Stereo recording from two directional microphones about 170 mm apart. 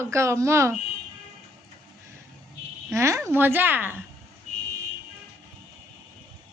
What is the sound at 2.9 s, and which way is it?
A woman's voice, 15° right (ahead or behind).